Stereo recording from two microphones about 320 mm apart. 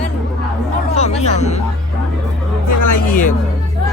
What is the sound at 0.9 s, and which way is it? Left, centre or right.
Speech, centre.